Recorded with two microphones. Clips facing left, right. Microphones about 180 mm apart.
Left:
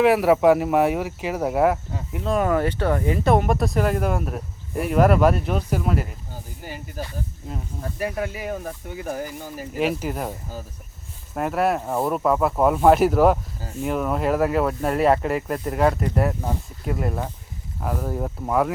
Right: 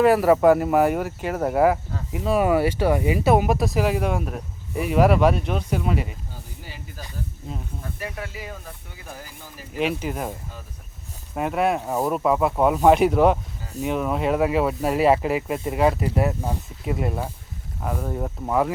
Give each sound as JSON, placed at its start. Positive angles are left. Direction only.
{"t": 0.0, "sound": "speech", "side_deg": 0}
{"t": 6.7, "sound": "snake", "side_deg": 50}
{"t": 8.2, "sound": "speech", "side_deg": 55}
{"t": 9.7, "sound": "speech", "side_deg": 5}
{"t": 11.3, "sound": "speech", "side_deg": 0}